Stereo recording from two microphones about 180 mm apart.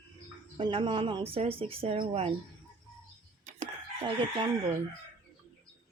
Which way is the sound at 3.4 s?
40° right (ahead or behind).